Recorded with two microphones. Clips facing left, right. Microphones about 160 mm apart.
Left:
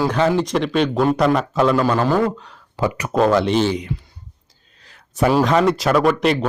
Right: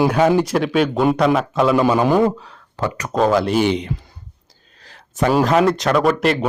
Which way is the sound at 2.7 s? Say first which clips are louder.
Left 2 dB; 15° left (ahead or behind).